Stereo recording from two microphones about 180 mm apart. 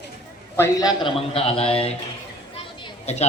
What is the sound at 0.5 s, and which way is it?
A man's voice, 15° left (ahead or behind).